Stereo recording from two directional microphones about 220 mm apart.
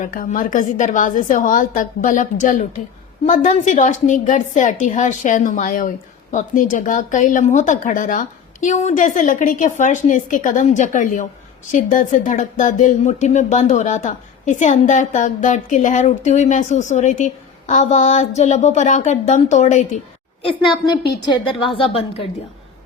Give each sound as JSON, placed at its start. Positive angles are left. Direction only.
{"t": 0.0, "sound": "speech", "side_deg": 35}
{"t": 20.4, "sound": "a woman's voice", "side_deg": 20}